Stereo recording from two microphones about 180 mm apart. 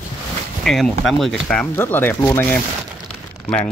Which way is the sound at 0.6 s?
Centre (ahead or behind).